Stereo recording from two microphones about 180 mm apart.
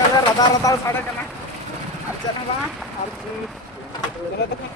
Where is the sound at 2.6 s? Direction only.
Centre (ahead or behind).